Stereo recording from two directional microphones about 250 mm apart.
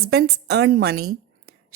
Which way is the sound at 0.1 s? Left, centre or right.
Right.